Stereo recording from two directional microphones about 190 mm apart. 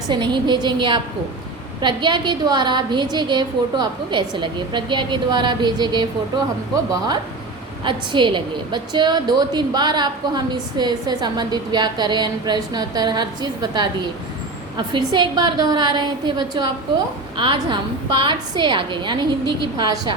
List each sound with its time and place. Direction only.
0.1 s a woman's voice: 25° right (ahead or behind)
7.9 s a woman's voice: 25° right (ahead or behind)